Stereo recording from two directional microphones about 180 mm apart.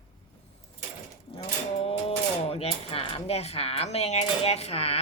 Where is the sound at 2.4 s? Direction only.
35° left (ahead or behind).